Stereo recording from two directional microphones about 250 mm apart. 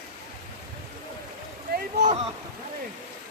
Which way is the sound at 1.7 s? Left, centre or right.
Right.